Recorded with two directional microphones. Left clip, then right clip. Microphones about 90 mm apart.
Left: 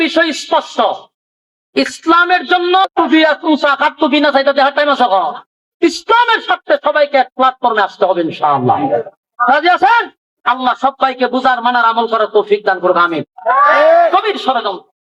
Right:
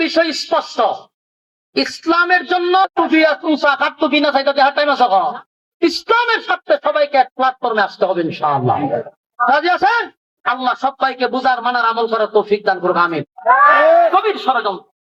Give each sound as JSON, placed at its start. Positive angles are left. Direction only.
{"t": 0.3, "sound": "speech", "side_deg": 45}
{"t": 1.7, "sound": "a man's voice", "side_deg": 35}
{"t": 2.1, "sound": "a sound", "side_deg": 15}
{"t": 3.2, "sound": "speech", "side_deg": 45}
{"t": 8.6, "sound": "a woman's voice", "side_deg": 15}
{"t": 9.6, "sound": "a man's voice", "side_deg": 40}
{"t": 10.4, "sound": "speech", "side_deg": 10}
{"t": 10.8, "sound": "a man's voice", "side_deg": 25}
{"t": 13.9, "sound": "a man's voice", "side_deg": 35}